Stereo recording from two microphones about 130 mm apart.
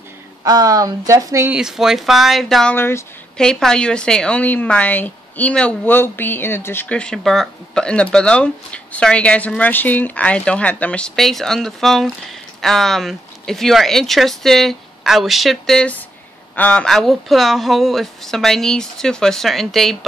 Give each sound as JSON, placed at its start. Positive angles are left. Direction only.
{"t": 0.4, "sound": "speech", "side_deg": -30}
{"t": 1.5, "sound": "speech", "side_deg": -5}
{"t": 2.7, "sound": "speech", "side_deg": 20}
{"t": 3.3, "sound": "a woman's voice", "side_deg": 5}